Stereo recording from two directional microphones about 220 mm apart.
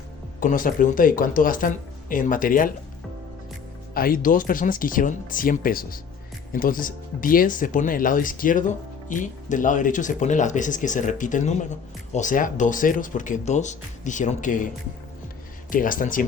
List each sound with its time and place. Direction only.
0.3 s speech: 40° left (ahead or behind)
3.9 s speech: 40° left (ahead or behind)
15.7 s speech: 40° left (ahead or behind)